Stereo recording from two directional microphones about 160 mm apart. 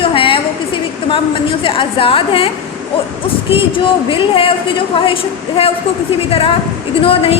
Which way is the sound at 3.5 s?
30° left (ahead or behind).